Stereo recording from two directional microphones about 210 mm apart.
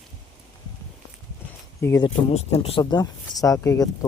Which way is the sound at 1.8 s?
15° left (ahead or behind).